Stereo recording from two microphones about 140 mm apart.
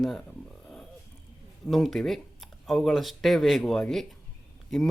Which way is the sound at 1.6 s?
Centre (ahead or behind).